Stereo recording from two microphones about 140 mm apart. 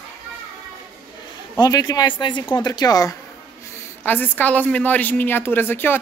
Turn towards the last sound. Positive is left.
turn(degrees=15)  # may be behind; listen again after turning